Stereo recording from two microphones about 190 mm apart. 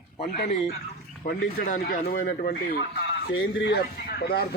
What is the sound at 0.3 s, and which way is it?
A man's voice, 60° left (ahead or behind).